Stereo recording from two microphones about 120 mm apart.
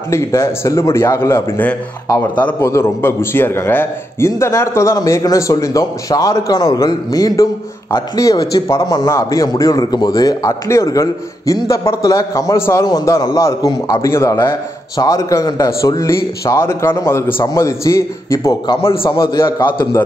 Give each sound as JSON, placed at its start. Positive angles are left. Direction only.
{"t": 0.1, "sound": "a man's voice", "side_deg": 25}
{"t": 18.7, "sound": "a man's voice", "side_deg": 50}